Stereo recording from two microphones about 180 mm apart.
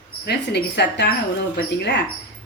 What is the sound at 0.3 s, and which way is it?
Speech, 70° left (ahead or behind).